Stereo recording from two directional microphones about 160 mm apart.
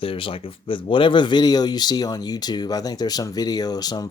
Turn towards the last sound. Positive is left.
turn(degrees=25)  # may be behind; listen again after turning